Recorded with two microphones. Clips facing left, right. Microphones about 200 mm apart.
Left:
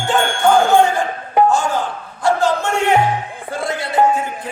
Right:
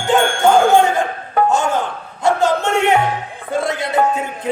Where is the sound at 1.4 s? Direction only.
20° right (ahead or behind).